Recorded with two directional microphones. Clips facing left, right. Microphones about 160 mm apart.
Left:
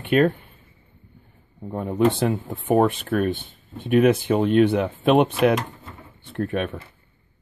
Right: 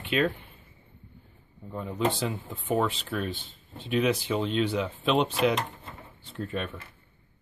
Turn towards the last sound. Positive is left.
turn(degrees=65)  # may be behind; listen again after turning